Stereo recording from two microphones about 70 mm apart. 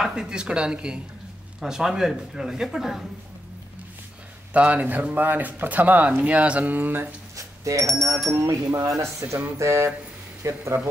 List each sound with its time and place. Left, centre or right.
0.0 s speech: centre
4.6 s speech: right
7.3 s a sound: right
7.8 s speech: centre
8.5 s speech: right